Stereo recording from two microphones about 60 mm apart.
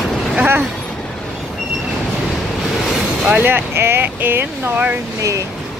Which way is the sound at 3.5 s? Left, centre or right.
Right.